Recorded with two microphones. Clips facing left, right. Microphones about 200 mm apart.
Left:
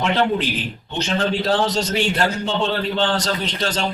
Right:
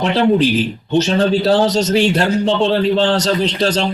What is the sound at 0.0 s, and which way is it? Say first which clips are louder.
Speech: right 6 dB; 35° right (ahead or behind).